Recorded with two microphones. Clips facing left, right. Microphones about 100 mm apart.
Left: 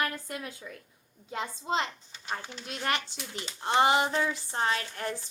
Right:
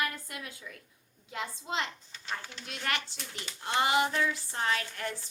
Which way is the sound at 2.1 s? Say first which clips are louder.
Left 2 dB; 15° left (ahead or behind).